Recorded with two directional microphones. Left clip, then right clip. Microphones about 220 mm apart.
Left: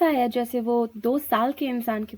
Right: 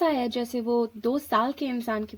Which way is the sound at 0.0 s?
35° left (ahead or behind).